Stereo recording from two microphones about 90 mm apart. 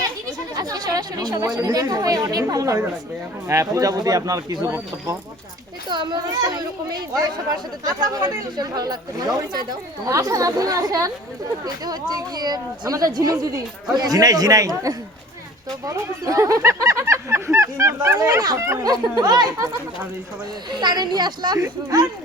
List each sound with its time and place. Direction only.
0.0 s speech: 45° right (ahead or behind)
5.9 s speech: 55° right (ahead or behind)
20.7 s speech: 50° right (ahead or behind)